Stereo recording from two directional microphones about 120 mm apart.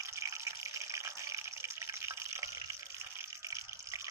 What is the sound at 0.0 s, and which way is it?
Water, 25° right (ahead or behind).